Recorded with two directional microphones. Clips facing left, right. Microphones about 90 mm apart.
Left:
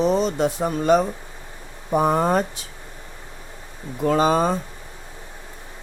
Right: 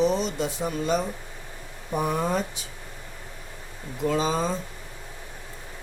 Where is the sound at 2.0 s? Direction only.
60° left (ahead or behind).